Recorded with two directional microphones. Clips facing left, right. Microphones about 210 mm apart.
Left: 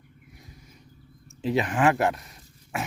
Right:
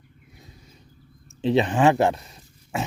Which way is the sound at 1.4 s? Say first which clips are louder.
Right 4 dB; 25° right (ahead or behind).